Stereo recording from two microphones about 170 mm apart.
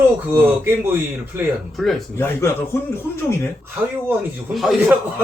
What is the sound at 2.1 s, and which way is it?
Speech, 15° left (ahead or behind).